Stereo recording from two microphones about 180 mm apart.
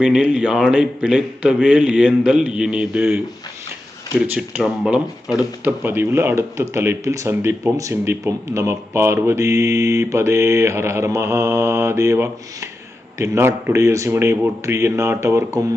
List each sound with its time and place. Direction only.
0.0 s a man's voice: 5° right (ahead or behind)
4.4 s speech: 5° right (ahead or behind)